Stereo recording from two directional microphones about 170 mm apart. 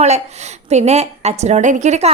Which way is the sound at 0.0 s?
40° right (ahead or behind).